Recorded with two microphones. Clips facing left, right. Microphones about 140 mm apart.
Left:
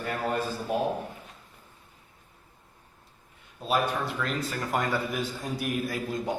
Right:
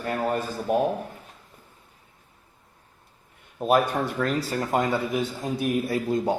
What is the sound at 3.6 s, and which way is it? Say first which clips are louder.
Speech: right 6 dB; 50° right (ahead or behind).